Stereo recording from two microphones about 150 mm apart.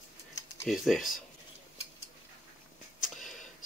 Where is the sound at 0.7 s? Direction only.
Centre (ahead or behind).